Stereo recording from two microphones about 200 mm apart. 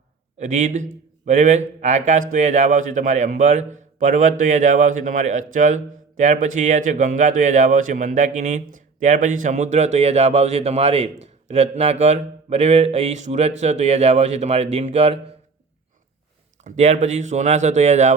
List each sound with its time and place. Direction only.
0.3 s a man's voice: 35° right (ahead or behind)
16.6 s a man's voice: 35° right (ahead or behind)